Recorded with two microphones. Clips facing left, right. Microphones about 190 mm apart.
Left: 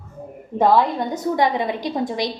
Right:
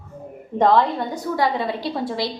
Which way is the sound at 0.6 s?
10° left (ahead or behind).